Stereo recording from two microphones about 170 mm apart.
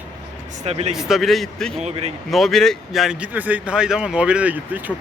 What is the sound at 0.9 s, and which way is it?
Speech, centre (ahead or behind).